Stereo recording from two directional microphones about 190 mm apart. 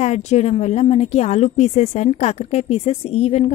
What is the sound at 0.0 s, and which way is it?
A woman's voice, 35° left (ahead or behind).